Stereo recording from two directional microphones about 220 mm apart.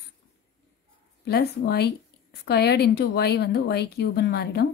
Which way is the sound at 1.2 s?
45° left (ahead or behind).